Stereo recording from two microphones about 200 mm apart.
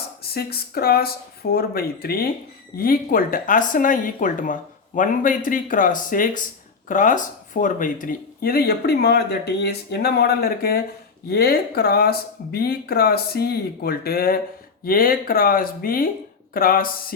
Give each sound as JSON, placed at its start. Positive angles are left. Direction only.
{"t": 0.3, "sound": "speech", "side_deg": 50}